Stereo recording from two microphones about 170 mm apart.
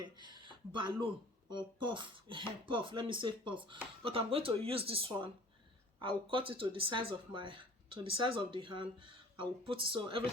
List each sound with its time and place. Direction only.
0.0 s speech: 25° right (ahead or behind)